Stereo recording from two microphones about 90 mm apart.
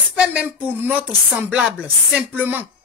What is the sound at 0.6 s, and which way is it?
A woman's voice, 20° right (ahead or behind).